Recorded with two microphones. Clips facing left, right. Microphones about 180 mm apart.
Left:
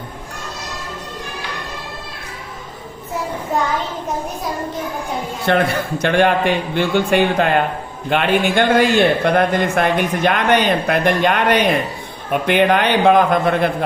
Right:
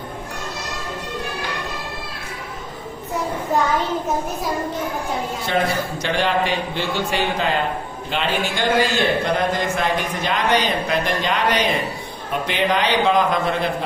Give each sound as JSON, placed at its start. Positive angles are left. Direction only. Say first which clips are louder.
{"t": 3.5, "sound": "a child's voice", "louder": "even", "side_deg": 0}
{"t": 5.5, "sound": "a man's voice", "louder": "left 5 dB", "side_deg": 60}